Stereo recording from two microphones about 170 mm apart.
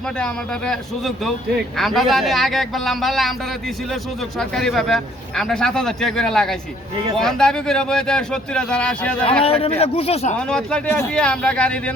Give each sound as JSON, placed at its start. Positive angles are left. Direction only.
{"t": 0.2, "sound": "a man's voice", "side_deg": 5}
{"t": 4.4, "sound": "a man's voice", "side_deg": 0}
{"t": 9.4, "sound": "a man's voice", "side_deg": 35}
{"t": 10.3, "sound": "speech", "side_deg": 5}